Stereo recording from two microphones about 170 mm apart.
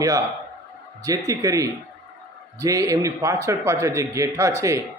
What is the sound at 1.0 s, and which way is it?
A man's voice, 20° right (ahead or behind).